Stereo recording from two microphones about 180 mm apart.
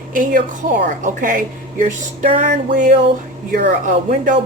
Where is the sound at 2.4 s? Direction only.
65° right (ahead or behind).